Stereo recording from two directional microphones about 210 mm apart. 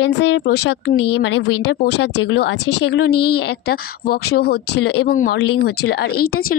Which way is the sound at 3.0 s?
50° left (ahead or behind).